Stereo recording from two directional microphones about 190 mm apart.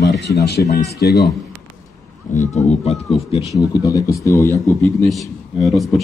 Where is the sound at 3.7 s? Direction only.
20° left (ahead or behind).